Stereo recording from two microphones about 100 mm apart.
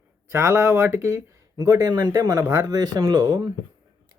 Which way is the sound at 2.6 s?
40° right (ahead or behind).